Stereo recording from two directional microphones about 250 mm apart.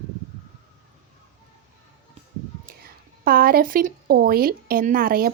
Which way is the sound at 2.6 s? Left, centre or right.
Right.